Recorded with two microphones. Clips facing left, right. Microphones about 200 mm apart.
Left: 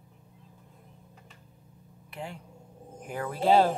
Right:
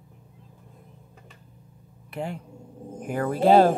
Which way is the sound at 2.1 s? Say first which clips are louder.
Right 8 dB; 55° right (ahead or behind).